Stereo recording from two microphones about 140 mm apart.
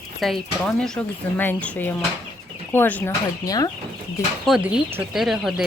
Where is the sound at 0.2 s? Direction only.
Centre (ahead or behind).